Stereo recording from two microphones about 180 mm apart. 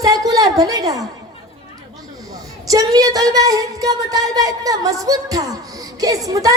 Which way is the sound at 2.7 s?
20° right (ahead or behind).